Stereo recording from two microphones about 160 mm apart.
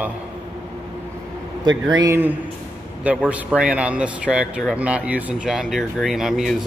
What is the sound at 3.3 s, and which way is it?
Speech, 5° right (ahead or behind).